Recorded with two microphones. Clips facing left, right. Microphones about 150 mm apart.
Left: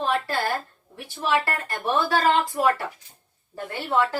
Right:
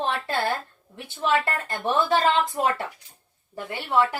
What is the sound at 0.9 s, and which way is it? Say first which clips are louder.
A woman's voice: even; 20° right (ahead or behind).